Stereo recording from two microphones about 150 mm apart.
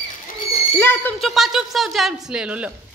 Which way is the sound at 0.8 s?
15° left (ahead or behind).